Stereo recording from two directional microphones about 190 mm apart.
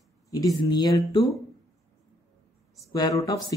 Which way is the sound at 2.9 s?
20° left (ahead or behind).